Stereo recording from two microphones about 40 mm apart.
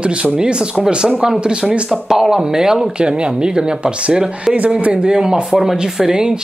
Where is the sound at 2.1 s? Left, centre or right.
Centre; by 5.0 s right.